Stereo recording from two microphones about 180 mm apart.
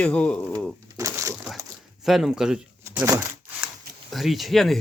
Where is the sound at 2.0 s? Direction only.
Centre (ahead or behind).